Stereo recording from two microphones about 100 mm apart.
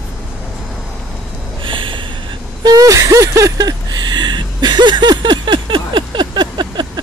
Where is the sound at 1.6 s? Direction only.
55° right (ahead or behind).